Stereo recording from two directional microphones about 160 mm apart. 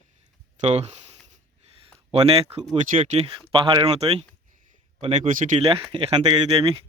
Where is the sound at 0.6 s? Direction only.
40° right (ahead or behind).